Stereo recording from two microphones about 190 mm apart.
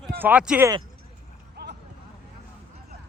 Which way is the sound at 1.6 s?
60° right (ahead or behind).